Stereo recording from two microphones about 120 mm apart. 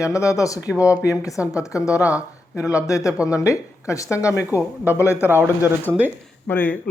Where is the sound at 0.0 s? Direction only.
25° left (ahead or behind).